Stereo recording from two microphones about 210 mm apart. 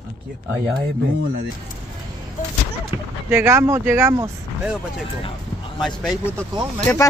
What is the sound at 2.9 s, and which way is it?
Speech, 10° right (ahead or behind).